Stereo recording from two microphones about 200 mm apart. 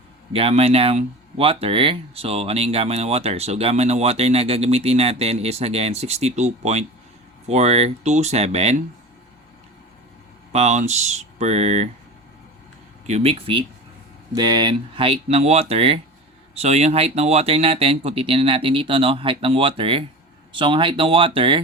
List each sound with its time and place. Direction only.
0.3 s speech: 30° right (ahead or behind)
10.5 s speech: 35° right (ahead or behind)
13.1 s speech: 30° right (ahead or behind)